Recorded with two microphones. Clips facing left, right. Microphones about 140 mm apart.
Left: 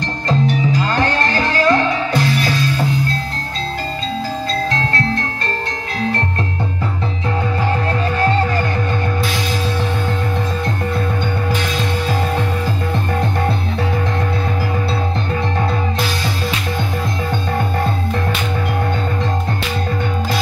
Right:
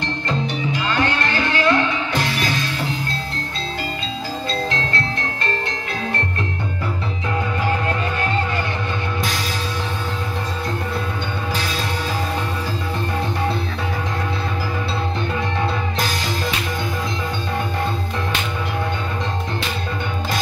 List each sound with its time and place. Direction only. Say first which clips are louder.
0.7 s music: left 4 dB; 40° left (ahead or behind)